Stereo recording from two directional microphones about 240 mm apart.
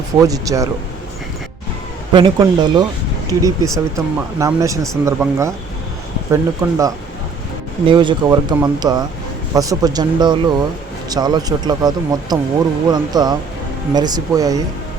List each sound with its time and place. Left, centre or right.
0.2 s speech: centre
2.1 s speech: centre